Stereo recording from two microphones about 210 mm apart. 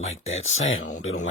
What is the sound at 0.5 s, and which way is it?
Speech, 70° left (ahead or behind).